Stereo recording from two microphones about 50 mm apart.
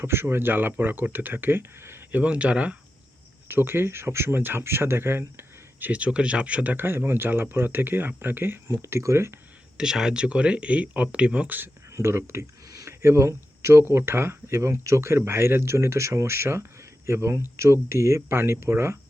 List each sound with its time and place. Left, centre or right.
0.0 s speech: right
2.1 s speech: right
3.5 s speech: right
4.4 s speech: right
5.8 s speech: right
6.7 s speech: right
8.6 s speech: right
9.7 s speech: centre
11.4 s speech: right
11.9 s a sound: right
13.0 s speech: right
13.8 s speech: right
15.2 s speech: right